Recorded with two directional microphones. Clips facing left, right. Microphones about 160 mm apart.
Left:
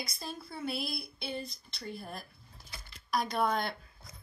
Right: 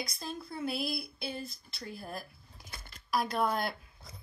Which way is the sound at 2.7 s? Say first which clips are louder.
Right 2 dB; 45° right (ahead or behind).